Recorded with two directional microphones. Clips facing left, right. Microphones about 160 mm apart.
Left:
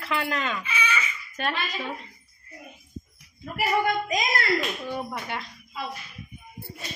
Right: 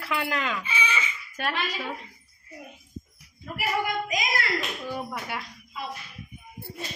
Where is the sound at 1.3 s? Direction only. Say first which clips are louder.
Even; 10° right (ahead or behind).